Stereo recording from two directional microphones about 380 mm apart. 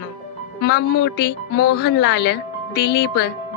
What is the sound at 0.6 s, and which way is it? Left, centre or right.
A woman's voice, left.